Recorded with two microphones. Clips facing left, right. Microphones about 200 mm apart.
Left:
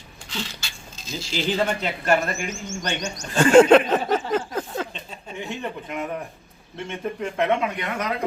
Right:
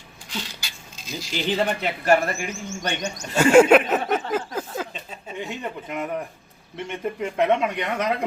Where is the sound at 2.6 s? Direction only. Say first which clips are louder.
Right 2 dB; 60° right (ahead or behind).